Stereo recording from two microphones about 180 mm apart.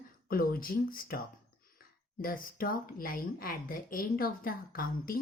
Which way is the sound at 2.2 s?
55° left (ahead or behind).